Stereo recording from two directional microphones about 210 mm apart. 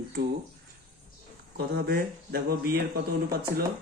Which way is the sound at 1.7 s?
50° right (ahead or behind).